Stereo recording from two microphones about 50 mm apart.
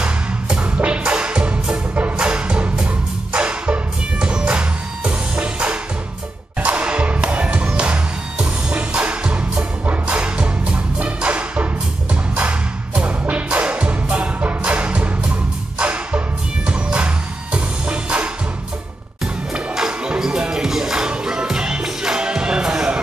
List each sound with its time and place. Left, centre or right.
0.0 s music: right
19.5 s music: centre